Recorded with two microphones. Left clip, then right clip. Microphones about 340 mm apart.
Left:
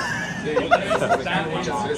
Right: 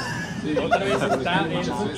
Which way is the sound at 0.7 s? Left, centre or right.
Left.